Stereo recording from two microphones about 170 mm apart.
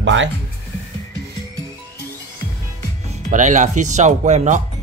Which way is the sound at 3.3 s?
45° right (ahead or behind).